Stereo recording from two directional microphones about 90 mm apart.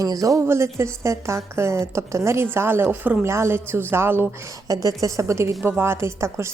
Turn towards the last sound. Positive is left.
turn(degrees=-30)  # may be behind; listen again after turning